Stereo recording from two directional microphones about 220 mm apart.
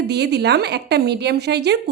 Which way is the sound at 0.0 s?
50° right (ahead or behind).